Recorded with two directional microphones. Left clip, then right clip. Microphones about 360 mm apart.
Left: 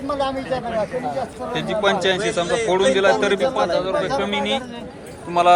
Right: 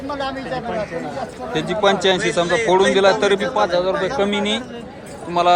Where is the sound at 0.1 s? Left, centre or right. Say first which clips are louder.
Left 3 dB; centre.